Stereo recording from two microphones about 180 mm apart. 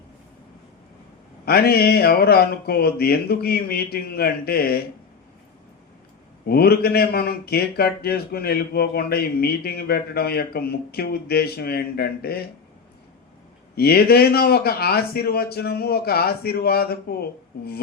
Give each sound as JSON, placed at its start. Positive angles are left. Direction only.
{"t": 1.5, "sound": "a man's voice", "side_deg": 60}
{"t": 6.4, "sound": "a man's voice", "side_deg": 60}
{"t": 13.7, "sound": "a man's voice", "side_deg": 60}